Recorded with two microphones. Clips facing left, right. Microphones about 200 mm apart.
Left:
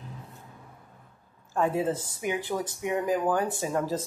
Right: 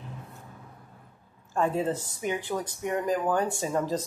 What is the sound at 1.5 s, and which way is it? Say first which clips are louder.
Speech: even; 10° left (ahead or behind).